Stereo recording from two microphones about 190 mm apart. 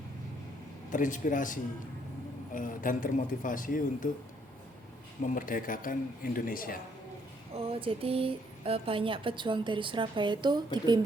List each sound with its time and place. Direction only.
0.9 s speech: 45° left (ahead or behind)
5.3 s speech: 45° left (ahead or behind)
7.5 s speech: 30° right (ahead or behind)